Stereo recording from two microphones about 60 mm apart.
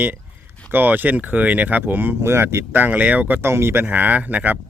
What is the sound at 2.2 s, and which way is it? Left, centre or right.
Speech, right.